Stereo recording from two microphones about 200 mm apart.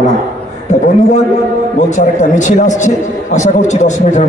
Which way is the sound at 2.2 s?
35° left (ahead or behind).